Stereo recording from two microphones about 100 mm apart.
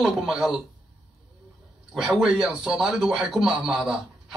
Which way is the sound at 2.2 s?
5° right (ahead or behind).